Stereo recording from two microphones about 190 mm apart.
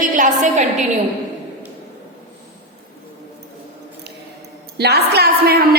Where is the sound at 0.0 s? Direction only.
40° right (ahead or behind).